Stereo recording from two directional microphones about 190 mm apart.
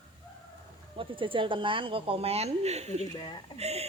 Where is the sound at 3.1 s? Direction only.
25° left (ahead or behind).